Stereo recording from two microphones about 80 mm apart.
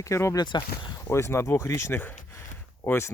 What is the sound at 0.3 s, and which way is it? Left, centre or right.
Speech, left.